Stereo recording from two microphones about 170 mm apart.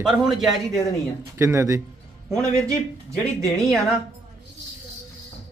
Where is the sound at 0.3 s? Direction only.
Centre (ahead or behind).